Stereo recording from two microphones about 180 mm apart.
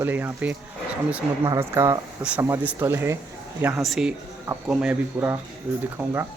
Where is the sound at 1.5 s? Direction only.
15° right (ahead or behind).